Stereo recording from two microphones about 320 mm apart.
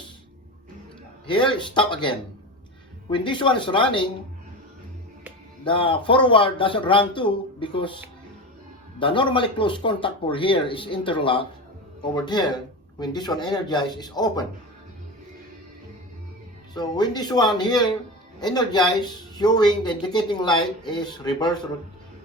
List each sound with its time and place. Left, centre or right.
1.3 s speech: centre
5.6 s speech: centre
16.7 s speech: centre